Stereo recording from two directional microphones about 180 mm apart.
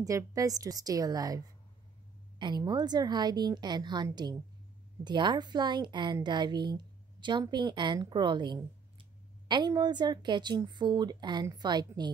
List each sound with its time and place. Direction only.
0.0 s a woman's voice: 20° right (ahead or behind)